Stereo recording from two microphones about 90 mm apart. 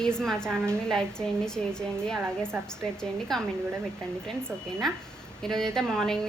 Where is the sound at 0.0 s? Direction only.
5° left (ahead or behind).